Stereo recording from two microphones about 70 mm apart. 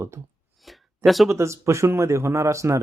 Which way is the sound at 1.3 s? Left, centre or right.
Right.